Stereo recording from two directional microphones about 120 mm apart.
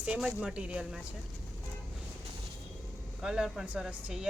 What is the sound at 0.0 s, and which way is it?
Speech, 10° right (ahead or behind).